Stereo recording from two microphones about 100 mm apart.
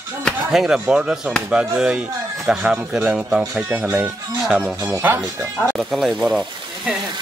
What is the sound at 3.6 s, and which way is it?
Speech, 20° right (ahead or behind).